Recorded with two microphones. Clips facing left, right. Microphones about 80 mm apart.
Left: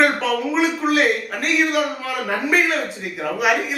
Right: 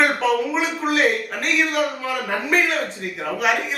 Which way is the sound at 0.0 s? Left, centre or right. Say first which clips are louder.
Even; centre.